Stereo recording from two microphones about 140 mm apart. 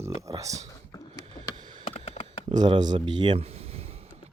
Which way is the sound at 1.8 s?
45° left (ahead or behind).